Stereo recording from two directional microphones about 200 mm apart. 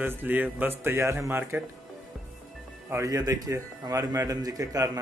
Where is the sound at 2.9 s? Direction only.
15° right (ahead or behind).